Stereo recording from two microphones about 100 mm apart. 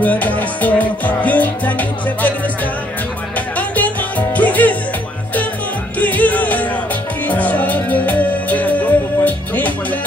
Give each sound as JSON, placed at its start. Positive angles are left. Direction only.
{"t": 0.0, "sound": "music", "side_deg": 15}
{"t": 5.9, "sound": "music", "side_deg": 15}